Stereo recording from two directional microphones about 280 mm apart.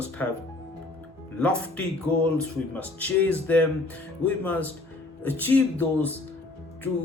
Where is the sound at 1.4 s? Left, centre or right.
Centre.